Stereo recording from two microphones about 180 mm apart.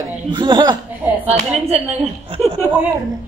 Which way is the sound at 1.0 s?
10° right (ahead or behind).